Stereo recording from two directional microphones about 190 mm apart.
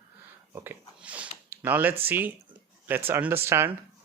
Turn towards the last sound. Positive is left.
turn(degrees=-10)  # may be behind; listen again after turning